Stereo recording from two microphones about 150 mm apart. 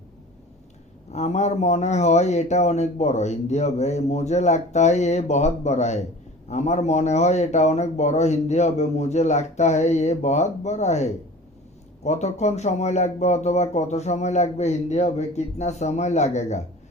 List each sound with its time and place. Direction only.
1.1 s speech: 50° left (ahead or behind)